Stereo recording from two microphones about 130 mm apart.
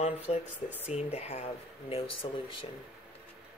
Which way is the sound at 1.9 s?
40° left (ahead or behind).